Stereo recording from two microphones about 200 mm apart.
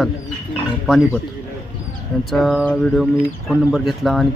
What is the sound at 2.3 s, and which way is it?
Speech, centre (ahead or behind).